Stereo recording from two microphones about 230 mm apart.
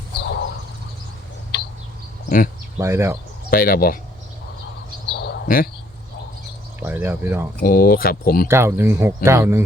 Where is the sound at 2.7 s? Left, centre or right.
Centre.